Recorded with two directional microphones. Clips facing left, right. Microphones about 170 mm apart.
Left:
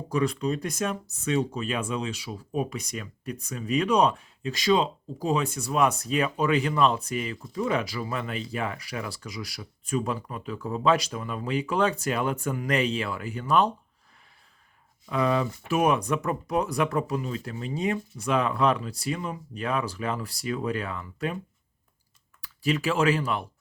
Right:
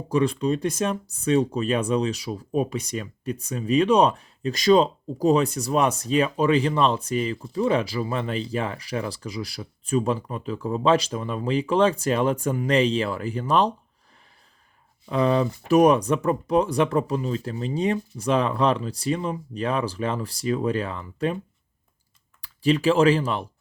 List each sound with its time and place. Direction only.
0.1 s speech: 30° right (ahead or behind)
15.0 s speech: 30° right (ahead or behind)
22.6 s speech: 30° right (ahead or behind)